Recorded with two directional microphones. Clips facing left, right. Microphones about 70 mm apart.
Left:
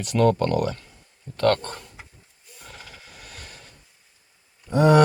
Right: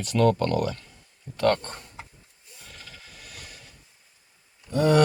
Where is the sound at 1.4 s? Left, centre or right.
Centre.